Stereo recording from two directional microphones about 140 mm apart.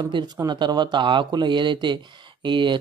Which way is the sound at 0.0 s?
30° right (ahead or behind).